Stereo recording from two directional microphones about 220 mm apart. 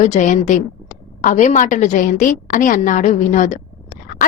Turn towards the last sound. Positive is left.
turn(degrees=35)  # may be behind; listen again after turning